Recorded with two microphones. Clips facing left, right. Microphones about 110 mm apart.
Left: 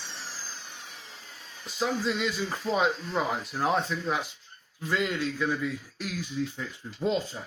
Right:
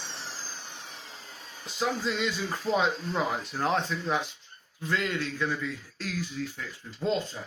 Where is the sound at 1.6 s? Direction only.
Centre (ahead or behind); by 7.0 s 20° left (ahead or behind).